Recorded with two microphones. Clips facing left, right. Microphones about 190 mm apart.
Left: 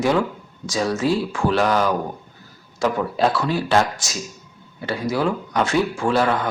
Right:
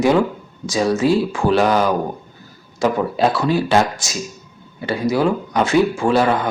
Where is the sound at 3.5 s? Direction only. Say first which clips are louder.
Right 3 dB; 5° right (ahead or behind).